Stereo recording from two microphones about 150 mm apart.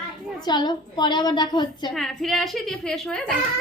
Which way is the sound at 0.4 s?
30° left (ahead or behind).